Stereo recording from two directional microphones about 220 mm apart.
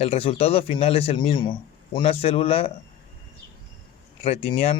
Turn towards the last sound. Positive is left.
turn(degrees=25)  # may be behind; listen again after turning